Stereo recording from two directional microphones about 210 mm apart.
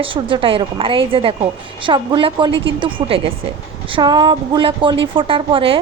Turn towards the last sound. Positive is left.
turn(degrees=-25)  # may be behind; listen again after turning